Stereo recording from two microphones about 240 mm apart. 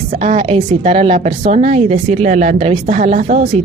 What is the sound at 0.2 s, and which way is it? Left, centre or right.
A woman's voice, right.